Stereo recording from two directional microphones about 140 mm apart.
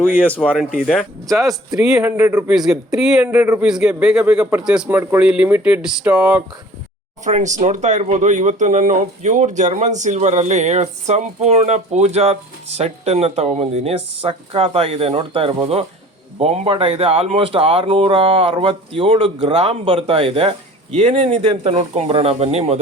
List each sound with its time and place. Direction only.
0.3 s speech: 10° left (ahead or behind); by 6.4 s 5° right (ahead or behind)
7.3 s speech: 60° right (ahead or behind)